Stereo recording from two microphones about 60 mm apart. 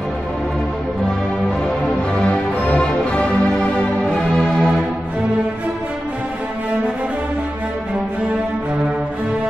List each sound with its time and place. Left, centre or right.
2.1 s music: centre